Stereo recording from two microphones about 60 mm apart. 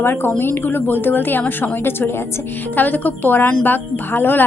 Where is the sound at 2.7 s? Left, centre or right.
Left.